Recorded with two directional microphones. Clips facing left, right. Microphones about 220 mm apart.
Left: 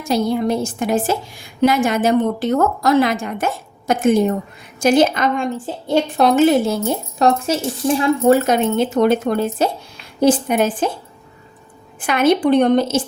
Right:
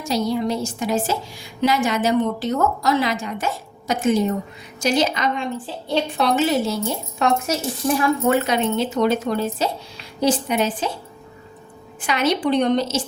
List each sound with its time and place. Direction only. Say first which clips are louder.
0.1 s a woman's voice: left 4 dB; 55° left (ahead or behind)
7.2 s speech: left 4 dB; 30° left (ahead or behind)
8.3 s a woman's voice: left 5 dB; 45° left (ahead or behind)
11.9 s a woman's voice: left 6 dB; 50° left (ahead or behind)